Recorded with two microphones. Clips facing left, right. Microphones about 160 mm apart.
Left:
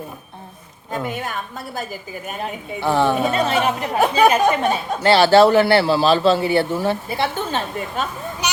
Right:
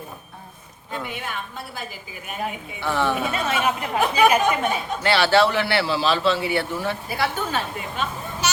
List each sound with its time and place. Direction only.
0.9 s a woman's voice: 40° left (ahead or behind); by 7.6 s 25° left (ahead or behind)